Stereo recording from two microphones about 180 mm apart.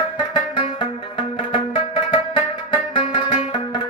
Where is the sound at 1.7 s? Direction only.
30° left (ahead or behind).